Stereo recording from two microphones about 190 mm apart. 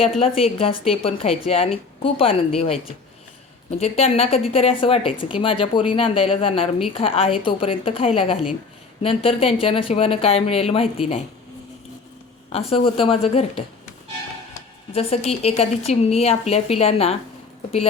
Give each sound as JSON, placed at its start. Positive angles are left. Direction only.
{"t": 0.2, "sound": "speech", "side_deg": 30}
{"t": 3.8, "sound": "speech", "side_deg": 35}
{"t": 12.5, "sound": "speech", "side_deg": 30}
{"t": 14.9, "sound": "speech", "side_deg": 35}